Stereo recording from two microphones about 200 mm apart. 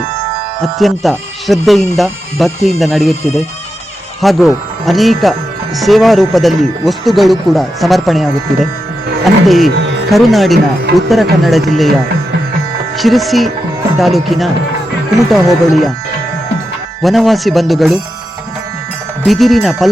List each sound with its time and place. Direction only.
0.8 s speech: centre (ahead or behind)
9.5 s speech: centre (ahead or behind)
13.0 s speech: centre (ahead or behind)
17.0 s speech: centre (ahead or behind)
19.2 s speech: centre (ahead or behind)